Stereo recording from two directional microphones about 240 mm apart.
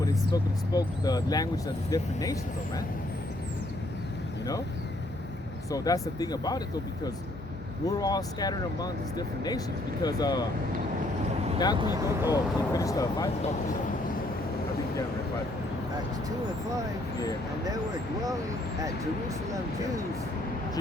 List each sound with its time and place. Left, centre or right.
0.0 s speech: centre
5.7 s speech: centre
7.9 s speech: centre
11.8 s speech: centre
12.3 s speech: centre